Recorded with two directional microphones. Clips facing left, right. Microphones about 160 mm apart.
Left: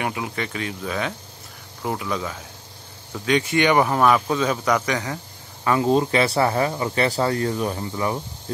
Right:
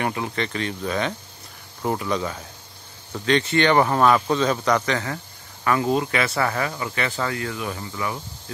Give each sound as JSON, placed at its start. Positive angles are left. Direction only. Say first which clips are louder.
{"t": 0.0, "sound": "speech", "louder": "right 1 dB", "side_deg": 10}